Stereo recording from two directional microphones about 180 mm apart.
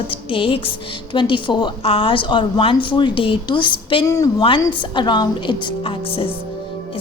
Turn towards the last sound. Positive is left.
turn(degrees=30)  # may be behind; listen again after turning